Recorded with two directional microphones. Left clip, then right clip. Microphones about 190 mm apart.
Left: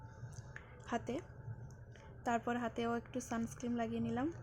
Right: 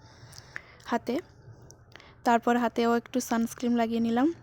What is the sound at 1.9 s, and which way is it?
A woman's voice, 55° right (ahead or behind).